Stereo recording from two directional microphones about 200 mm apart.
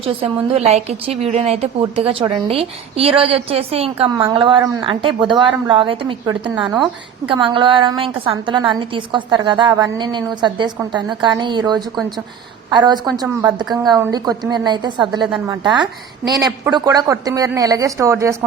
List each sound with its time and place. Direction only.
0.0 s a woman's voice: 30° right (ahead or behind)